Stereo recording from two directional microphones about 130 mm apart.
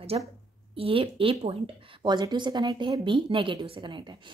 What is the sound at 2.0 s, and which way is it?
Speech, 35° right (ahead or behind).